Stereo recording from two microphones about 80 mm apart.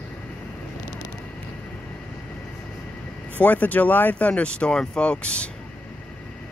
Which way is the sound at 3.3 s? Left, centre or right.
Centre.